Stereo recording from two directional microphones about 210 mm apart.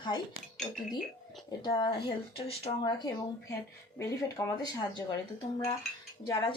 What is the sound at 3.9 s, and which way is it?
Speech, 15° left (ahead or behind).